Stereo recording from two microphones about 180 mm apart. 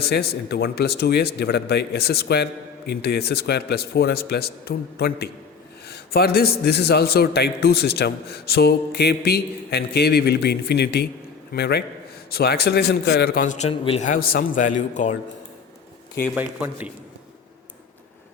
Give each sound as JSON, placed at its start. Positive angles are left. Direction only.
{"t": 0.0, "sound": "a man's voice", "side_deg": 60}
{"t": 16.3, "sound": "a man's voice", "side_deg": -10}